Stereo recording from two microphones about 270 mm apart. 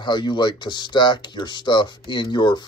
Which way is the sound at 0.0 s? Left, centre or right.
Centre.